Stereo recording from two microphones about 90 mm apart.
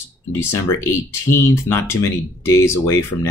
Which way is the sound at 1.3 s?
30° left (ahead or behind).